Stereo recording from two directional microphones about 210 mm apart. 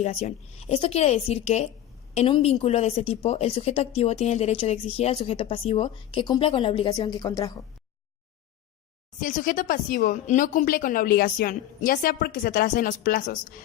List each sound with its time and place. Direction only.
0.0 s a woman's voice: 30° left (ahead or behind)
9.2 s a woman's voice: 40° left (ahead or behind)